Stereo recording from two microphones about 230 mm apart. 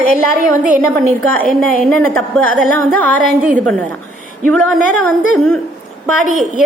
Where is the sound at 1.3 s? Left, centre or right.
Centre.